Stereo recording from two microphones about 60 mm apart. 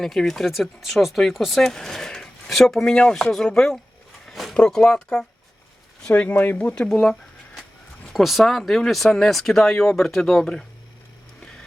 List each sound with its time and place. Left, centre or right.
0.0 s speech: centre
4.3 s a sound: centre
4.5 s speech: centre
6.2 s speech: left
6.6 s speech: centre
6.9 s a sound: centre
8.1 s speech: centre